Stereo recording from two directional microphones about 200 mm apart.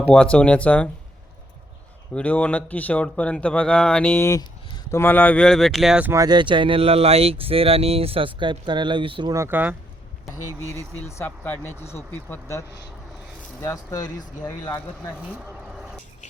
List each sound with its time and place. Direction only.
0.1 s speech: 5° left (ahead or behind)
2.1 s speech: 5° left (ahead or behind); by 9.7 s 10° right (ahead or behind)
11.2 s speech: 10° left (ahead or behind)